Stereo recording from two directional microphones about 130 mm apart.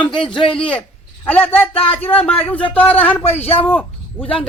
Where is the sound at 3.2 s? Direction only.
50° left (ahead or behind).